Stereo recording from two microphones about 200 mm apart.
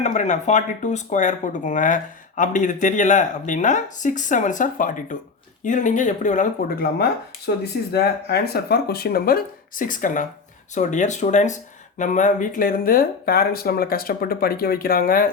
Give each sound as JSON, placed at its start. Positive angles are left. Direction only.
{"t": 0.0, "sound": "speech", "side_deg": 35}